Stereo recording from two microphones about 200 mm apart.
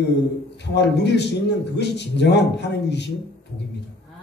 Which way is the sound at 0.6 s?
60° left (ahead or behind).